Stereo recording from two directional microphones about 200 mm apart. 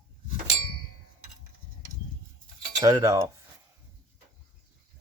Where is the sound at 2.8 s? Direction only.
15° right (ahead or behind).